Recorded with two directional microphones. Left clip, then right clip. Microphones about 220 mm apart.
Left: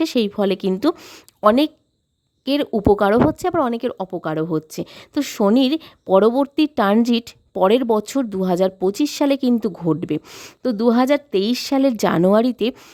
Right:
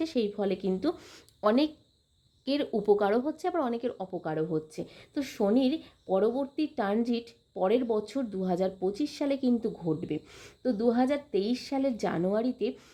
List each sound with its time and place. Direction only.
0.0 s speech: 45° left (ahead or behind)